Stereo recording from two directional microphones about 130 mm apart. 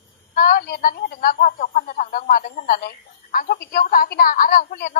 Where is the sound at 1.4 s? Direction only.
90° left.